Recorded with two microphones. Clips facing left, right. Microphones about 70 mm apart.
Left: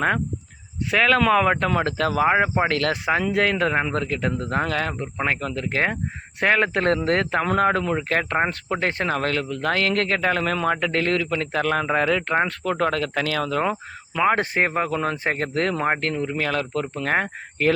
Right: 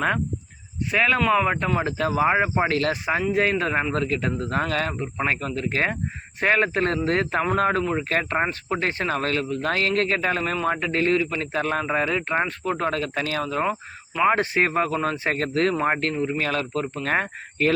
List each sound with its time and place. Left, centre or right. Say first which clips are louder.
0.9 s speech: left 2 dB; left
14.3 s speech: even; left
16.1 s speech: right 1 dB; left
16.4 s speech: left 1 dB; left